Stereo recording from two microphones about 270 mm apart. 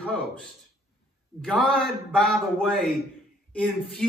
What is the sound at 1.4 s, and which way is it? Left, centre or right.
A man's voice, centre.